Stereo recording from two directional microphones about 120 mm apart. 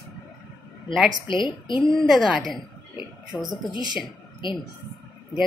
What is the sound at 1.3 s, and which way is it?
Speech, 40° left (ahead or behind).